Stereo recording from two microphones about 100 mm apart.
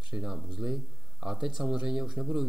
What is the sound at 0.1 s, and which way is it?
Speech, 5° right (ahead or behind).